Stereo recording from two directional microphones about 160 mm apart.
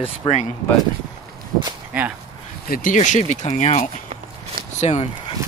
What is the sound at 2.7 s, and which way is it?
Speech, 60° left (ahead or behind).